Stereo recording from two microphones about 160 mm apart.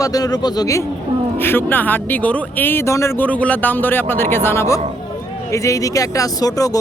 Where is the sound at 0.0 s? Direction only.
25° left (ahead or behind).